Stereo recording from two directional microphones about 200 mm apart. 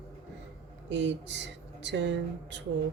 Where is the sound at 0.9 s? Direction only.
60° right (ahead or behind).